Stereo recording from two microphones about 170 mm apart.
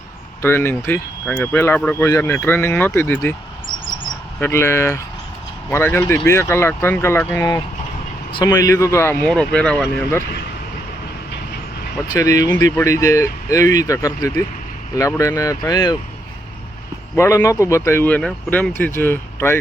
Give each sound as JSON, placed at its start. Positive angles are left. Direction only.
{"t": 0.4, "sound": "speech", "side_deg": 15}
{"t": 4.4, "sound": "speech", "side_deg": 15}
{"t": 9.2, "sound": "speech", "side_deg": 5}
{"t": 12.1, "sound": "speech", "side_deg": 20}
{"t": 17.2, "sound": "speech", "side_deg": 15}